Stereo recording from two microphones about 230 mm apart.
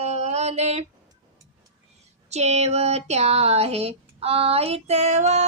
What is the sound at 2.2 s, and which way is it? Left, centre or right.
Speech, right.